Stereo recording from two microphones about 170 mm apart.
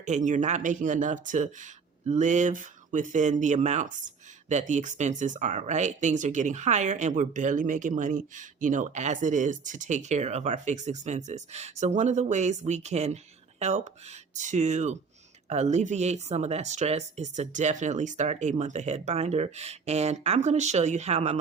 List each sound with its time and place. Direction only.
0.0 s speech: 45° right (ahead or behind)